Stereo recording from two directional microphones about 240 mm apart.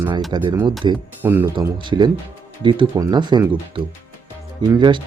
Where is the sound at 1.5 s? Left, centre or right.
Centre.